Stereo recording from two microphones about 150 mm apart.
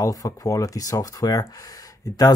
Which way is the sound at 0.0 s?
25° left (ahead or behind).